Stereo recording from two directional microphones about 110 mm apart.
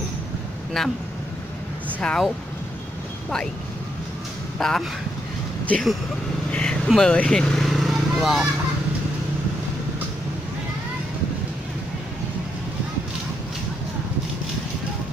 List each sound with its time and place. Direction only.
0.8 s speech: centre (ahead or behind)
2.0 s speech: 10° left (ahead or behind)
4.6 s speech: 5° left (ahead or behind)
6.5 s vehicle: 10° left (ahead or behind)
6.9 s speech: 5° left (ahead or behind)